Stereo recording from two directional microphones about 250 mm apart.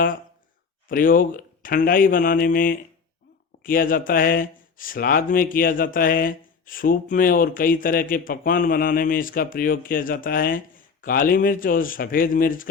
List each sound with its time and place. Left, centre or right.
0.9 s speech: left